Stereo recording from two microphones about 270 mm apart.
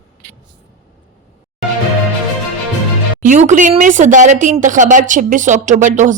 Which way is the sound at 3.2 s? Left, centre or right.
Right.